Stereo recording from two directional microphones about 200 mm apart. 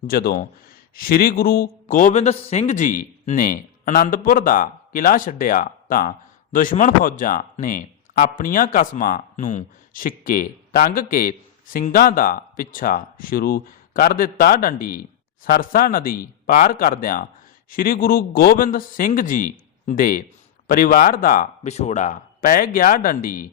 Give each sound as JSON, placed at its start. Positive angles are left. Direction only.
{"t": 0.1, "sound": "a man's voice", "side_deg": 45}